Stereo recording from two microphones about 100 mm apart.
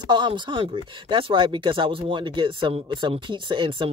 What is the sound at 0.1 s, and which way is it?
Speech, 55° right (ahead or behind).